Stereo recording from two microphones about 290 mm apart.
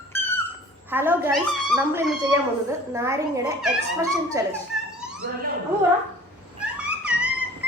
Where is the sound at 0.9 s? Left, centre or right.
Centre.